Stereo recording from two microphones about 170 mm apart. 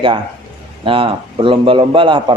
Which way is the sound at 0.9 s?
30° right (ahead or behind).